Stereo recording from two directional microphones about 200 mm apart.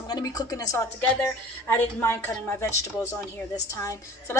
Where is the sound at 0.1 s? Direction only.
20° left (ahead or behind).